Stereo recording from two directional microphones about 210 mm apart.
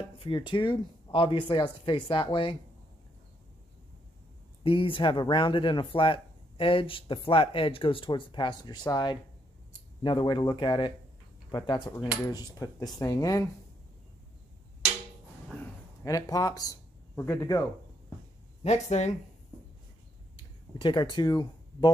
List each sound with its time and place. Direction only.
0.2 s speech: 25° left (ahead or behind)
4.6 s speech: 25° left (ahead or behind)
16.0 s speech: 15° left (ahead or behind)
18.6 s speech: 30° left (ahead or behind)
20.7 s speech: 20° left (ahead or behind)